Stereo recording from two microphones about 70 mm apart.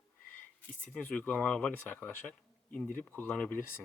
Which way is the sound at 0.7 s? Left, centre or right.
Centre.